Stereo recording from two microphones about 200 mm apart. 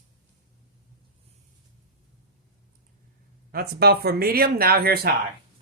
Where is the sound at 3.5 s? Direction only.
50° right (ahead or behind).